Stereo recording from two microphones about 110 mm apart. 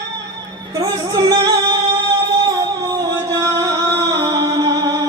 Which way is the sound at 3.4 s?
35° right (ahead or behind).